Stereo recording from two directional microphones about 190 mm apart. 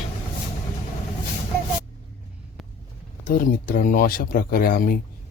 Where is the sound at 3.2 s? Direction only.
45° left (ahead or behind).